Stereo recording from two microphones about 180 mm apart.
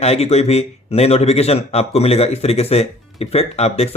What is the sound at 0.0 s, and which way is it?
Speech, 35° left (ahead or behind).